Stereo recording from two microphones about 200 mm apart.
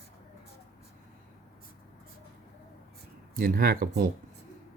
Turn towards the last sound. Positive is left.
turn(degrees=-45)  # may be behind; listen again after turning